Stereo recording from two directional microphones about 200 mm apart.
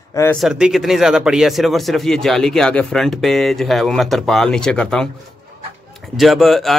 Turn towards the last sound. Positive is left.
turn(degrees=0)  # may be behind; listen again after turning